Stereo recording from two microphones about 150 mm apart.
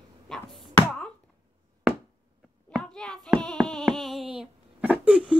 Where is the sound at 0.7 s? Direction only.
5° left (ahead or behind).